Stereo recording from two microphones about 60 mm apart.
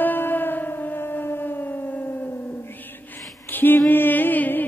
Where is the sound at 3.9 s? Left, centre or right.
Left.